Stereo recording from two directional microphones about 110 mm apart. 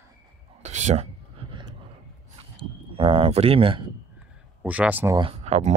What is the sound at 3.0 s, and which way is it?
Speech, 55° right (ahead or behind).